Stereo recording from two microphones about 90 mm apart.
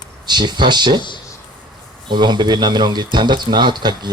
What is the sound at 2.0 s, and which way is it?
Speech, 55° right (ahead or behind).